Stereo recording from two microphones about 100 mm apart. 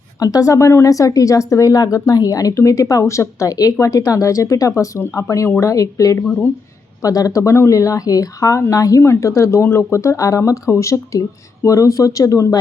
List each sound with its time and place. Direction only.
0.2 s a woman's voice: 35° left (ahead or behind)